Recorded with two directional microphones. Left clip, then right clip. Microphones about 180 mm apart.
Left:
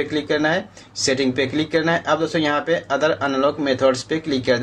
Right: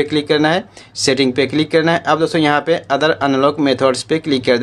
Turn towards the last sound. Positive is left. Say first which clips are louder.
# right 5 dB
turn(degrees=-45)  # may be behind; listen again after turning